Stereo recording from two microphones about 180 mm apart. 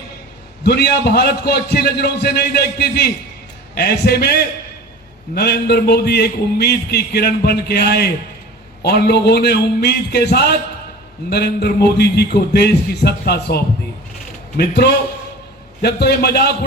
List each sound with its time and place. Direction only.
0.6 s a man's voice: 65° left (ahead or behind)